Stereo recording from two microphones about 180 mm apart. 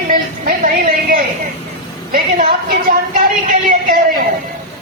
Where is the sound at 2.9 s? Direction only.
55° right (ahead or behind).